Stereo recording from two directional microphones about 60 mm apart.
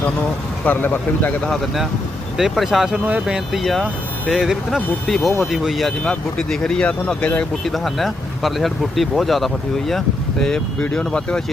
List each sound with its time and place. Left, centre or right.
0.6 s speech: left
1.4 s speech: centre
2.4 s speech: centre
3.6 s speech: centre
6.0 s speech: centre
7.6 s speech: centre